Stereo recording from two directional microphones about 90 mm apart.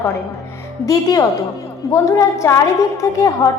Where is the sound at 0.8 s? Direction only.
40° left (ahead or behind).